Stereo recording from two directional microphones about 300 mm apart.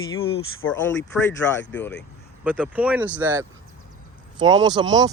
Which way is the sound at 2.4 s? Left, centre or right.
Centre.